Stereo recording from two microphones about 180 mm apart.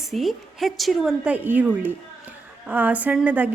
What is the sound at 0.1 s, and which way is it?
A woman's voice, centre (ahead or behind).